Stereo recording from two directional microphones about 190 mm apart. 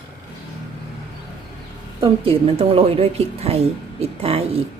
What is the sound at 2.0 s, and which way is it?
A woman's voice, 30° right (ahead or behind).